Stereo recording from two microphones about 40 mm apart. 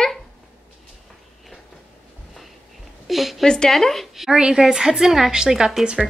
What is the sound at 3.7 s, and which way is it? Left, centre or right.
Speech, centre.